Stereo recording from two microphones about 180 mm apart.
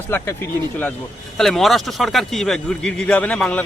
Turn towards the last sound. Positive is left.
turn(degrees=5)  # may be behind; listen again after turning